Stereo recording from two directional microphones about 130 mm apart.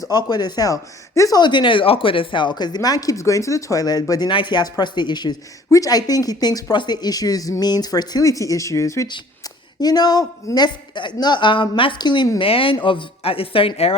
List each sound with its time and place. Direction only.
0.0 s a woman's voice: 30° left (ahead or behind)